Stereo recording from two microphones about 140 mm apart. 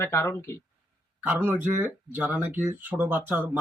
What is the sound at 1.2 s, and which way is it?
Speech, 15° right (ahead or behind).